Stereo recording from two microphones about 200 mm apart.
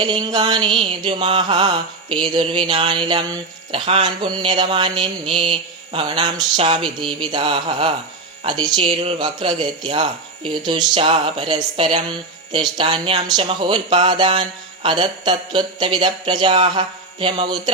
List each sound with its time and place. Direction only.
0.0 s speech: 20° right (ahead or behind)